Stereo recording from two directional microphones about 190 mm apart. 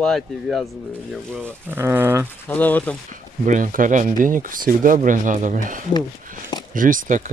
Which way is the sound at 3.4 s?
45° right (ahead or behind).